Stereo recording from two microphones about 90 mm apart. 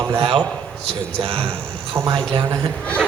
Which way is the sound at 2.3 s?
65° right (ahead or behind).